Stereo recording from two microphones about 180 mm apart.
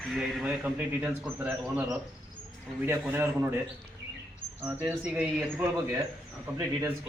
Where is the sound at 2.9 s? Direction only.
10° right (ahead or behind).